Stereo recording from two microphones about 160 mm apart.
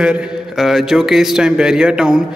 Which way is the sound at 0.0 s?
5° right (ahead or behind).